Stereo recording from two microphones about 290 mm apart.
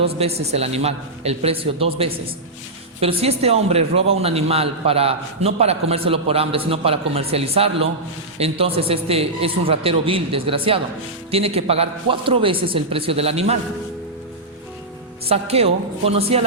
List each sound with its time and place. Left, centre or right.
0.0 s a man's voice: right
15.3 s a man's voice: right